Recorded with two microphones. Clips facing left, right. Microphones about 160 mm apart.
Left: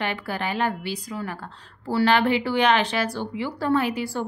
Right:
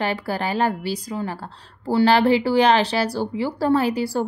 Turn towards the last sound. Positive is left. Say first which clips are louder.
# right 4 dB
turn(degrees=-35)  # may be behind; listen again after turning